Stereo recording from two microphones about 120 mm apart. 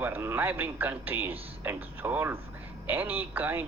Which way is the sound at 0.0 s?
20° right (ahead or behind).